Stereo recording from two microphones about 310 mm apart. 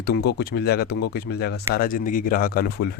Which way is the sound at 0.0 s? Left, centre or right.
Left.